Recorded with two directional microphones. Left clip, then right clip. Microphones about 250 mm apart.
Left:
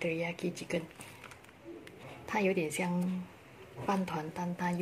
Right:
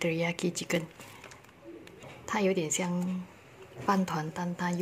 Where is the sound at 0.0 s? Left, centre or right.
Right.